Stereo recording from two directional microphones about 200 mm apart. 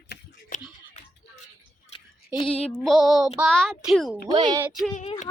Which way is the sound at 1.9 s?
25° left (ahead or behind).